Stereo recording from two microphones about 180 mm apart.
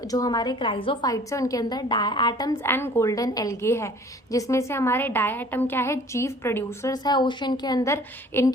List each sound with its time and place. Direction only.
0.1 s a woman's voice: 20° left (ahead or behind)
1.1 s a woman's voice: 20° left (ahead or behind)
2.6 s a woman's voice: 10° left (ahead or behind)